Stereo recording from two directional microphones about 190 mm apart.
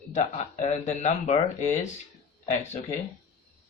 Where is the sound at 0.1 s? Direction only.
40° left (ahead or behind).